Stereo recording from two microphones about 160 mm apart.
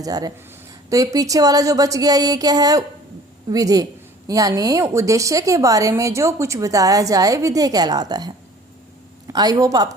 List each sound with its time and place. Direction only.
0.0 s a woman's voice: 25° right (ahead or behind)